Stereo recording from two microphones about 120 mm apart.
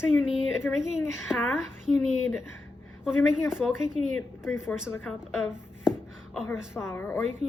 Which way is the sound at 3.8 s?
5° right (ahead or behind).